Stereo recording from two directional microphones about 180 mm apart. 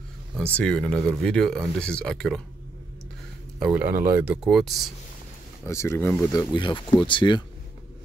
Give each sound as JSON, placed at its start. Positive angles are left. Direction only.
{"t": 0.6, "sound": "speech", "side_deg": 5}
{"t": 3.5, "sound": "speech", "side_deg": -5}
{"t": 5.7, "sound": "speech", "side_deg": 15}
{"t": 6.3, "sound": "speech", "side_deg": 25}